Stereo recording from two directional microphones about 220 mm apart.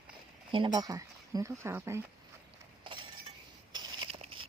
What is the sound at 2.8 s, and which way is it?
Chink, 20° right (ahead or behind).